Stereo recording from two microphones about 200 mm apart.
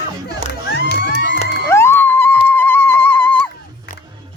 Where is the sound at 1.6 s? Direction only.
15° left (ahead or behind).